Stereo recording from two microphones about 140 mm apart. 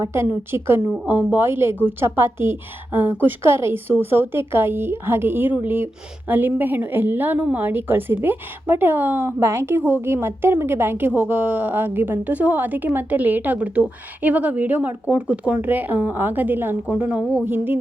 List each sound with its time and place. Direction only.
0.0 s a woman's voice: 20° right (ahead or behind)